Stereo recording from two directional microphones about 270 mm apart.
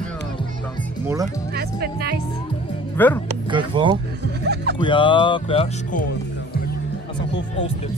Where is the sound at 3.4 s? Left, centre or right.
Centre.